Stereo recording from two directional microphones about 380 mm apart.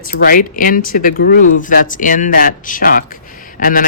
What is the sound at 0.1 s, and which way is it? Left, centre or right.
Speech, left.